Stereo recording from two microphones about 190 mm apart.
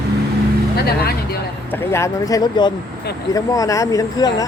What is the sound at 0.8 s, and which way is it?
Speech, 55° left (ahead or behind).